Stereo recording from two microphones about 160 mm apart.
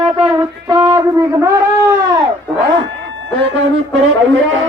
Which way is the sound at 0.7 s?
20° right (ahead or behind).